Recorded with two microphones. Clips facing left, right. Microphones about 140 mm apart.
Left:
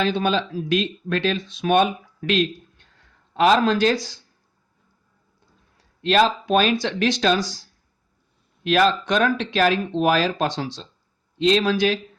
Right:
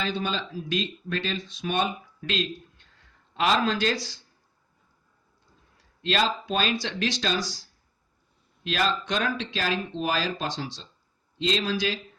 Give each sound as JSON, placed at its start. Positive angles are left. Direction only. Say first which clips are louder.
{"t": 0.0, "sound": "speech", "louder": "left 8 dB", "side_deg": 65}
{"t": 3.3, "sound": "speech", "louder": "left 7 dB", "side_deg": 45}
{"t": 6.0, "sound": "speech", "louder": "left 7 dB", "side_deg": 50}
{"t": 8.6, "sound": "speech", "louder": "left 8 dB", "side_deg": 60}